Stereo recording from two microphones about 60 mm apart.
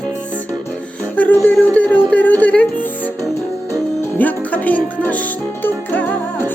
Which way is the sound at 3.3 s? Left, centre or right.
Left.